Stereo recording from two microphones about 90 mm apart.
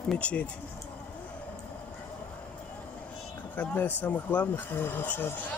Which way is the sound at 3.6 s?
20° left (ahead or behind).